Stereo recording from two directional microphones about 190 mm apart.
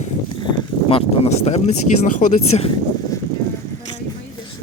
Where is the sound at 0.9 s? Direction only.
30° left (ahead or behind).